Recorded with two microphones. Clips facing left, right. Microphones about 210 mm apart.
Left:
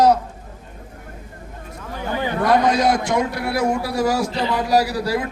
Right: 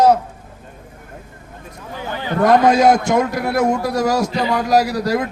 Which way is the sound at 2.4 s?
45° right (ahead or behind).